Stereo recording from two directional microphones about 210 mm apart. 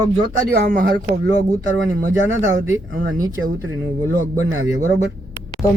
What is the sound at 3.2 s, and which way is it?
Speech, 15° right (ahead or behind).